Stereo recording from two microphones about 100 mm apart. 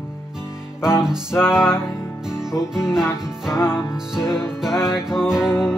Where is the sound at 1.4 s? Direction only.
25° left (ahead or behind).